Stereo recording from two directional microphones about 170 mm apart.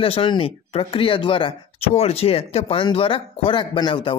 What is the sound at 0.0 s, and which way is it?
Speech, 30° left (ahead or behind).